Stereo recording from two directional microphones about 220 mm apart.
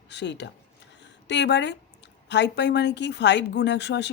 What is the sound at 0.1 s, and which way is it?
Speech, 50° left (ahead or behind).